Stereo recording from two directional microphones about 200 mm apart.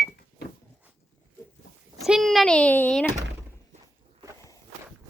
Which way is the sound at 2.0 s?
Centre (ahead or behind).